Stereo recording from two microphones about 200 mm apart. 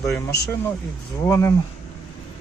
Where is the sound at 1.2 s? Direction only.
15° left (ahead or behind).